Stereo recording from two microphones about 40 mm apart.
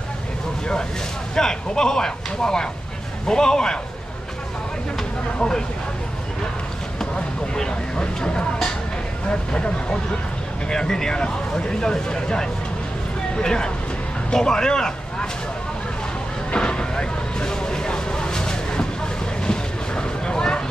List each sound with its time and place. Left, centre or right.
1.3 s speech: centre
7.2 s speech: left
16.5 s vehicle: left